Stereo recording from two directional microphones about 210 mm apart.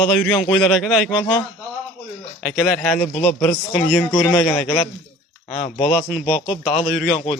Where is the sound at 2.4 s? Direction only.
5° left (ahead or behind).